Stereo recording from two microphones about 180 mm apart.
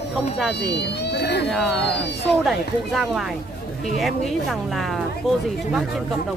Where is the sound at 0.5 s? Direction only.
70° left (ahead or behind).